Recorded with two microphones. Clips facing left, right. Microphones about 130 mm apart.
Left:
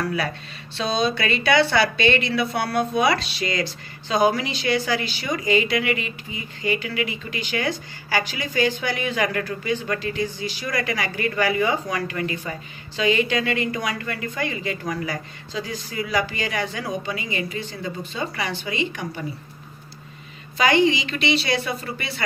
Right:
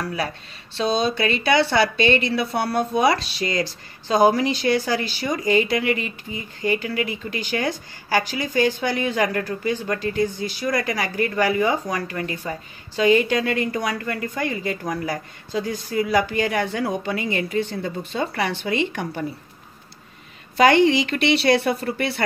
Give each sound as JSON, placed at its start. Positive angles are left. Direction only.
{"t": 0.8, "sound": "a woman's voice", "side_deg": -40}
{"t": 20.5, "sound": "a woman's voice", "side_deg": -60}